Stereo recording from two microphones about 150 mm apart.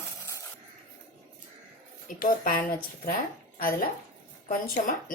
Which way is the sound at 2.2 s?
65° left (ahead or behind).